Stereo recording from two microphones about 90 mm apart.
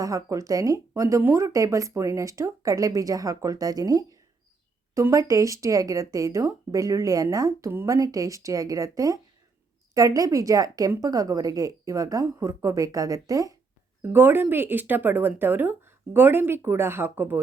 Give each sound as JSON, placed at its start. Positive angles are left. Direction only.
{"t": 0.0, "sound": "speech", "side_deg": -35}
{"t": 14.0, "sound": "speech", "side_deg": -25}